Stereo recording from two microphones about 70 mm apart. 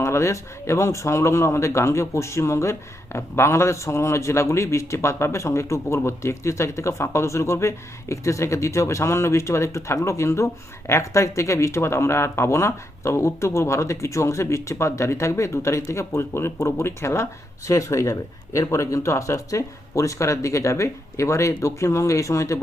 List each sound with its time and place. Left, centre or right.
0.0 s speech: left